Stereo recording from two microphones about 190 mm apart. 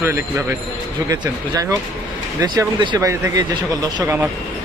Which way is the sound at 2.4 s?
20° right (ahead or behind).